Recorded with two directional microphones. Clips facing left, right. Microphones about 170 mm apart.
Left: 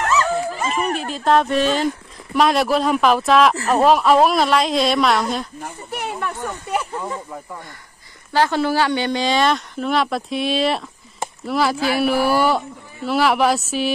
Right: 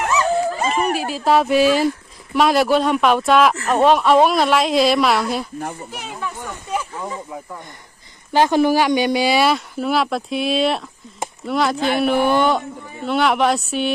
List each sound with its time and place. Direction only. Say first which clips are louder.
0.0 s dog: right 1 dB; 15° right (ahead or behind)
0.7 s speech: right 2 dB; 5° right (ahead or behind)
5.9 s speech: left 4 dB; 65° left (ahead or behind)
8.3 s speech: right 3 dB; 15° right (ahead or behind); by 13.9 s centre (ahead or behind)